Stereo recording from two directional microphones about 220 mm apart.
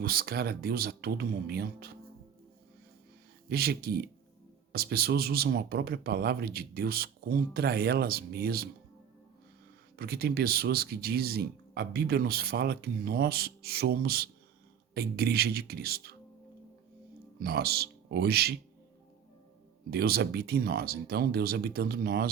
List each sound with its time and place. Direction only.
0.0 s speech: 45° right (ahead or behind)
3.5 s speech: 45° right (ahead or behind)
10.0 s speech: 45° right (ahead or behind)
17.4 s speech: 45° right (ahead or behind)
19.9 s speech: 45° right (ahead or behind)